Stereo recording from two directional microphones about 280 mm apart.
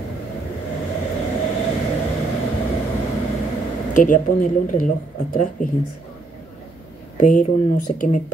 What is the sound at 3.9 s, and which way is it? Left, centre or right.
Speech, left.